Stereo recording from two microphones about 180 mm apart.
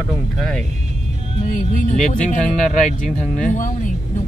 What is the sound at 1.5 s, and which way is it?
Speech, 45° left (ahead or behind).